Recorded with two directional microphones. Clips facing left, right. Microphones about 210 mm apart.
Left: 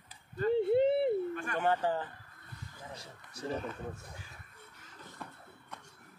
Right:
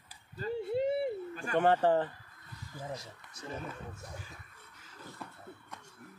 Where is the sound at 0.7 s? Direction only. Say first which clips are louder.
Left 2 dB; 60° left (ahead or behind).